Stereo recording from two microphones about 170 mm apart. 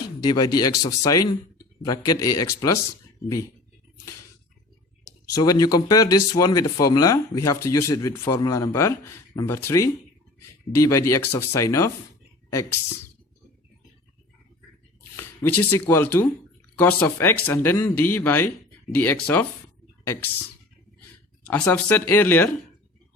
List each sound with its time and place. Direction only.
0.2 s speech: 25° left (ahead or behind)
5.0 s speech: 20° left (ahead or behind)
15.1 s speech: 15° left (ahead or behind)
21.4 s speech: 10° left (ahead or behind)